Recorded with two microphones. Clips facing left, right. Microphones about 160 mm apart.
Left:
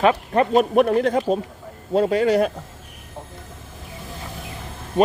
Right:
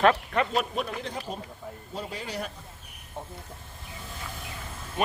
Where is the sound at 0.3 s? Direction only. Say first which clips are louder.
Left 9 dB; 40° left (ahead or behind).